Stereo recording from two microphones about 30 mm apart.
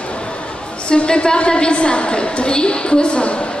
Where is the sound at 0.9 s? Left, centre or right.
Left.